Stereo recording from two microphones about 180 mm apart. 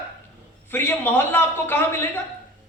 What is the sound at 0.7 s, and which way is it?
A man's voice, 10° left (ahead or behind).